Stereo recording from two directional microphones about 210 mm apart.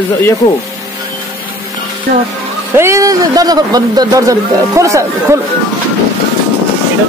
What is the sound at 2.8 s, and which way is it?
Speech, 15° right (ahead or behind).